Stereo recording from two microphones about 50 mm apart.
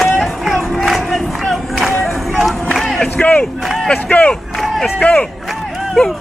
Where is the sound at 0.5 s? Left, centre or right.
Centre.